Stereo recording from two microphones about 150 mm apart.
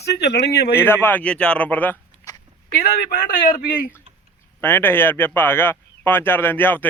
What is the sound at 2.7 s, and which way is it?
Speech, 90° left.